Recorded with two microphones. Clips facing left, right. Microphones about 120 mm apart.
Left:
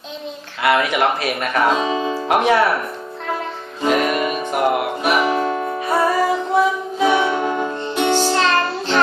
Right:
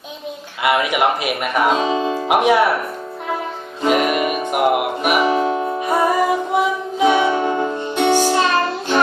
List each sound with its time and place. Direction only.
0.6 s speech: 15° right (ahead or behind)
3.8 s music: 15° right (ahead or behind)